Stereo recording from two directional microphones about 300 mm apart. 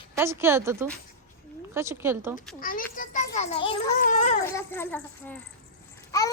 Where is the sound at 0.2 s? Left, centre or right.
Centre.